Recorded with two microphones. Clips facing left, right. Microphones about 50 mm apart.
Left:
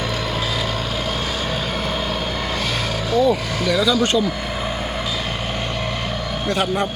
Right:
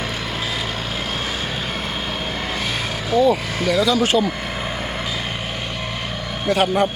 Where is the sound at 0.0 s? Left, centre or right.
Right.